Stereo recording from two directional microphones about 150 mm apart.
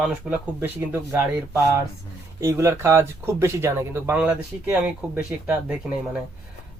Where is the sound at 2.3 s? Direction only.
20° right (ahead or behind).